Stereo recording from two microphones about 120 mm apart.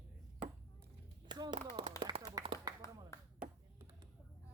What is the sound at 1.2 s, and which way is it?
Speech, 40° right (ahead or behind).